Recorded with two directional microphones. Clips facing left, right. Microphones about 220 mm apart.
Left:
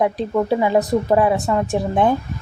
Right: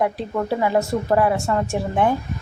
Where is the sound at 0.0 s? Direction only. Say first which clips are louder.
Left 4 dB; 20° left (ahead or behind).